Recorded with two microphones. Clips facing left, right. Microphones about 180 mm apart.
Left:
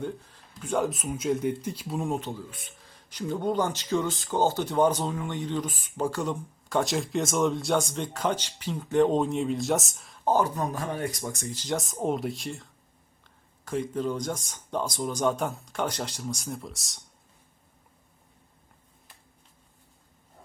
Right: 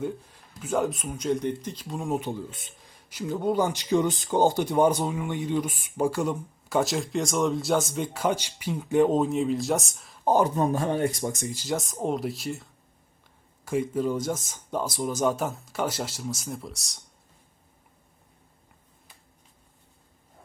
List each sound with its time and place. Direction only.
0.6 s speech: centre (ahead or behind)
2.1 s speech: 10° right (ahead or behind)
10.2 s speech: 20° right (ahead or behind)
11.4 s speech: 10° right (ahead or behind)
13.7 s speech: 10° right (ahead or behind)